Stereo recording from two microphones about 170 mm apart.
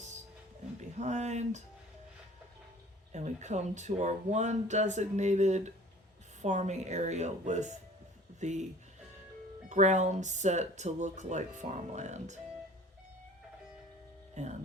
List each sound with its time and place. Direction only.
0.8 s speech: 45° right (ahead or behind)
3.1 s speech: 40° right (ahead or behind)
9.6 s speech: 45° right (ahead or behind)
14.4 s speech: 45° right (ahead or behind)